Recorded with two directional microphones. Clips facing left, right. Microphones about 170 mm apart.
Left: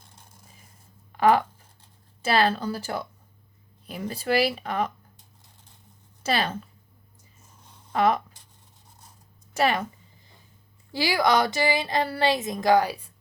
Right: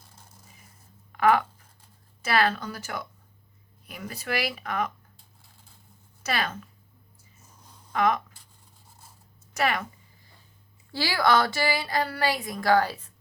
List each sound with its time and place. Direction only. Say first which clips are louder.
1.1 s speech: left 2 dB; 30° left (ahead or behind)
6.2 s speech: left 4 dB; 30° left (ahead or behind)
7.9 s speech: left 2 dB; 30° left (ahead or behind)
9.6 s speech: left 3 dB; 30° left (ahead or behind)
10.9 s speech: left 1 dB; 15° left (ahead or behind)